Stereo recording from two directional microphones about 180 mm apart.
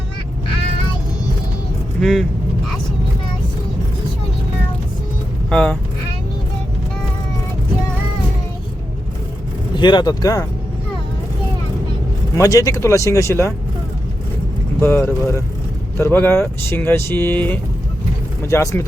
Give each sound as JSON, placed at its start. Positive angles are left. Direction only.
{"t": 2.0, "sound": "speech", "side_deg": 0}
{"t": 5.5, "sound": "speech", "side_deg": 5}
{"t": 9.7, "sound": "speech", "side_deg": 25}
{"t": 12.4, "sound": "speech", "side_deg": 20}
{"t": 14.8, "sound": "speech", "side_deg": 15}